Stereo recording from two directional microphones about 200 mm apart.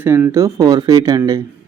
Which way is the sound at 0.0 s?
10° right (ahead or behind).